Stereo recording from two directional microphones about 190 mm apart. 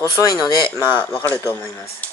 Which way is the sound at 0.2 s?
20° left (ahead or behind).